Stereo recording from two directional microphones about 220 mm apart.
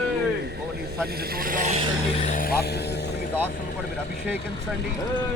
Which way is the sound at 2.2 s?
35° left (ahead or behind).